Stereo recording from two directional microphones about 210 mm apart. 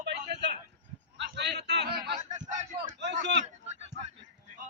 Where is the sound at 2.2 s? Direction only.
35° right (ahead or behind).